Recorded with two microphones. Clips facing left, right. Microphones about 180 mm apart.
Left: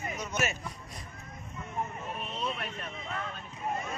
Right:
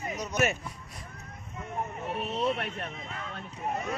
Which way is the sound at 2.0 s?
70° right (ahead or behind).